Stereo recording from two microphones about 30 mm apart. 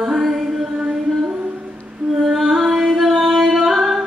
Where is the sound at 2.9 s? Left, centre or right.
Centre.